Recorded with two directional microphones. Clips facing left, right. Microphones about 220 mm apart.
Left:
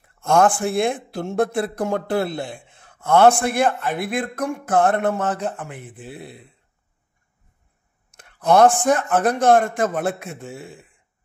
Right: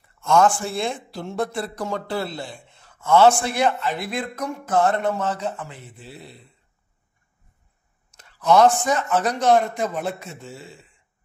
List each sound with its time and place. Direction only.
0.2 s speech: 55° left (ahead or behind)
8.1 s speech: 55° left (ahead or behind)